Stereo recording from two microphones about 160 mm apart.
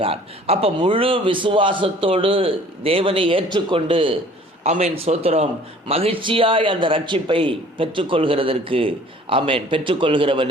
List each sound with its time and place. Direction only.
0.0 s a man's voice: 35° right (ahead or behind)